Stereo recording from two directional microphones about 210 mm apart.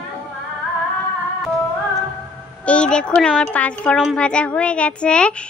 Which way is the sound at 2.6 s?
5° left (ahead or behind).